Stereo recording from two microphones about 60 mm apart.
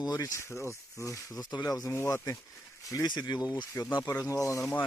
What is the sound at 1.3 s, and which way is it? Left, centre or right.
Speech, left.